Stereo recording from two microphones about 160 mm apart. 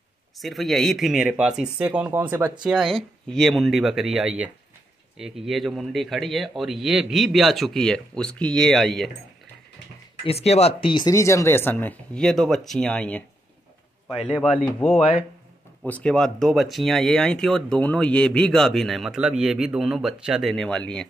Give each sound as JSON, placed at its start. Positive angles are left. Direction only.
{"t": 0.4, "sound": "speech", "side_deg": 0}
{"t": 2.6, "sound": "speech", "side_deg": 0}
{"t": 10.2, "sound": "speech", "side_deg": 40}
{"t": 14.4, "sound": "speech", "side_deg": 10}
{"t": 14.9, "sound": "speech", "side_deg": 35}
{"t": 15.8, "sound": "speech", "side_deg": 5}